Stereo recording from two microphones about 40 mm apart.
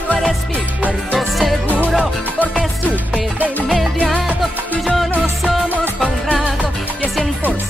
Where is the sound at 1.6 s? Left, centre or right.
Right.